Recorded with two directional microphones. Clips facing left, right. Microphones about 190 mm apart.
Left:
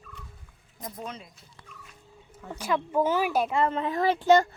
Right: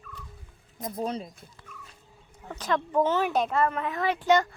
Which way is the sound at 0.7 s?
30° right (ahead or behind).